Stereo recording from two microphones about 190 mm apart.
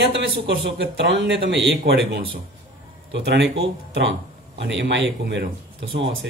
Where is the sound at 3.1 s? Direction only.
60° right (ahead or behind).